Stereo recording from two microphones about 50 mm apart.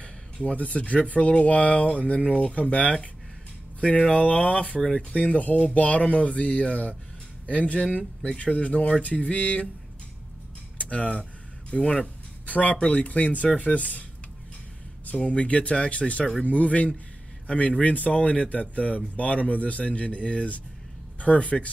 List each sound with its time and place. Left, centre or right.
0.0 s speech: left
10.8 s speech: left
11.8 s speech: centre
12.4 s speech: left
15.2 s speech: left